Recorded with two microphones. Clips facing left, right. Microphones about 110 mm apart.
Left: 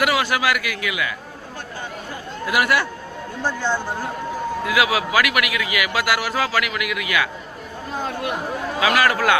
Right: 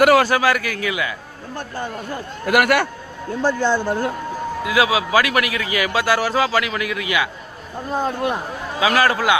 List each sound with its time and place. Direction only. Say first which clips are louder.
0.0 s a man's voice: right 6 dB; 40° right (ahead or behind)
2.5 s speech: right 4 dB; 55° right (ahead or behind)
3.4 s speech: right 5 dB; 80° right
4.6 s a man's voice: right 2 dB; 25° right (ahead or behind)
8.8 s a man's voice: right 1 dB; 30° right (ahead or behind)